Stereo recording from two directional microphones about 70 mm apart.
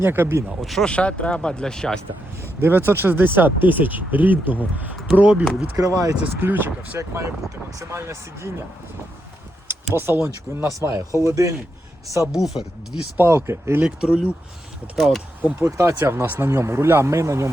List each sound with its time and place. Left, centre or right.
0.0 s speech: right
0.6 s speech: centre
0.9 s speech: centre
2.4 s speech: right
5.7 s speech: right
6.4 s speech: right
7.1 s speech: right
9.9 s speech: right
10.7 s speech: right
12.3 s speech: centre
13.1 s speech: right
13.8 s speech: centre
14.9 s speech: centre
15.8 s speech: right